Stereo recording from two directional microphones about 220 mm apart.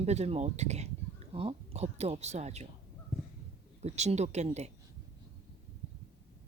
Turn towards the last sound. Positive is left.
turn(degrees=-30)  # may be behind; listen again after turning